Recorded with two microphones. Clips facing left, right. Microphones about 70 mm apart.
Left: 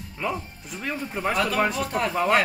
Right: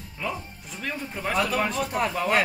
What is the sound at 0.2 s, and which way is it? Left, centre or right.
Speech, centre.